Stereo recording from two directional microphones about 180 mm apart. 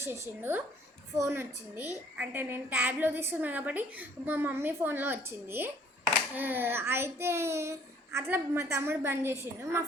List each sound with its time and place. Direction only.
0.0 s a woman's voice: 10° right (ahead or behind)